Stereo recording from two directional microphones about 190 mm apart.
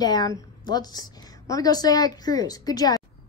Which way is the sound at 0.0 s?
20° left (ahead or behind).